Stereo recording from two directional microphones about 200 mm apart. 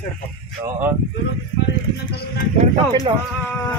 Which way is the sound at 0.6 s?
10° right (ahead or behind).